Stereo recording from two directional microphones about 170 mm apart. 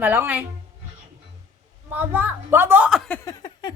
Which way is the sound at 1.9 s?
10° right (ahead or behind).